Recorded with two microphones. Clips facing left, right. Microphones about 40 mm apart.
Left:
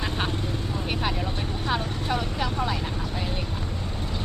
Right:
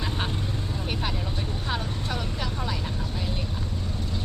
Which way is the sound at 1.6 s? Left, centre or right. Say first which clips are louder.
Left 5 dB; centre.